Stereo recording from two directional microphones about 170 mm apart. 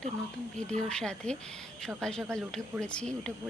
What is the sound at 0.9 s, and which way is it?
Speech, 5° left (ahead or behind).